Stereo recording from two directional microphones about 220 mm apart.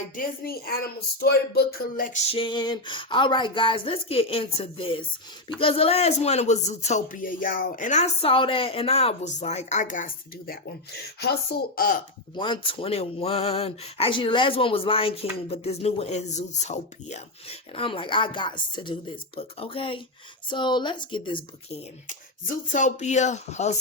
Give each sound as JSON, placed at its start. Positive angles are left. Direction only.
{"t": 0.2, "sound": "speech", "side_deg": 45}
{"t": 2.3, "sound": "speech", "side_deg": 20}
{"t": 12.3, "sound": "speech", "side_deg": 20}
{"t": 22.7, "sound": "speech", "side_deg": 35}